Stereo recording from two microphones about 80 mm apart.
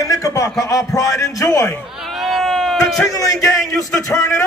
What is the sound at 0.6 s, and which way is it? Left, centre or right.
Speech, left.